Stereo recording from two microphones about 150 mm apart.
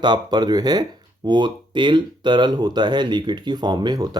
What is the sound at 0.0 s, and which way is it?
Speech, 30° right (ahead or behind).